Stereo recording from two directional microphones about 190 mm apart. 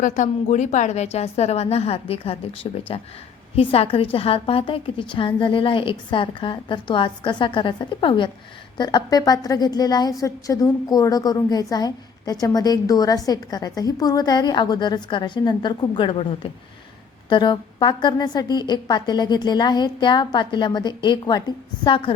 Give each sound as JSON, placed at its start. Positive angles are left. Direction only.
{"t": 0.0, "sound": "a woman's voice", "side_deg": 40}